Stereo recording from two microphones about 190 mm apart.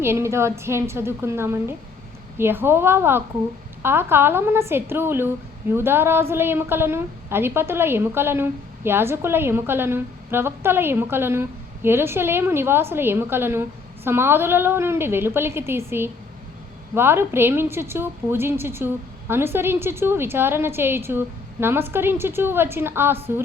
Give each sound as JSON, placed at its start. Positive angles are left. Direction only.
{"t": 0.0, "sound": "a woman's voice", "side_deg": -15}